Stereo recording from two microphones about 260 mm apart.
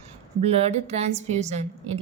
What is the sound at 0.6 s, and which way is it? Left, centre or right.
A woman's voice, right.